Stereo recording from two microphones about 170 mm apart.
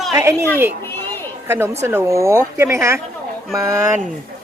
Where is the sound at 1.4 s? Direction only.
15° right (ahead or behind).